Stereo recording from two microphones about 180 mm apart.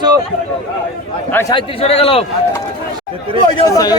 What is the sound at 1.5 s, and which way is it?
Speech, 35° left (ahead or behind).